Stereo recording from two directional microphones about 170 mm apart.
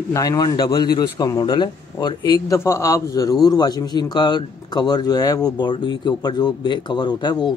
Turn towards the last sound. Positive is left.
turn(degrees=25)  # may be behind; listen again after turning